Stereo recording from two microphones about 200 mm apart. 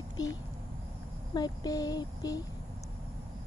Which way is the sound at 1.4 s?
20° left (ahead or behind).